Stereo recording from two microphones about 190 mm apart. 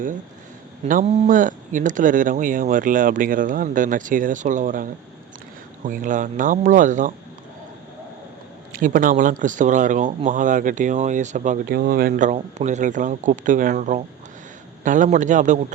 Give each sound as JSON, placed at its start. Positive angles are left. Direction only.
{"t": 1.0, "sound": "speech", "side_deg": -35}
{"t": 8.7, "sound": "speech", "side_deg": -45}